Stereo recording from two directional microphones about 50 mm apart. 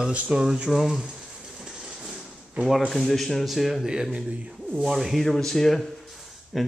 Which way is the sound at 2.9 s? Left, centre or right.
Centre.